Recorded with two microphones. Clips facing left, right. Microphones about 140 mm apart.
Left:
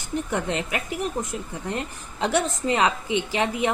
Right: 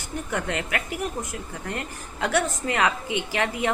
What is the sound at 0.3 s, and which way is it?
A woman's voice, 20° left (ahead or behind).